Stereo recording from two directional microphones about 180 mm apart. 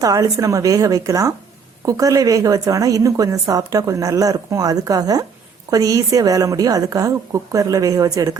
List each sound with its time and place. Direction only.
0.0 s a woman's voice: 20° right (ahead or behind)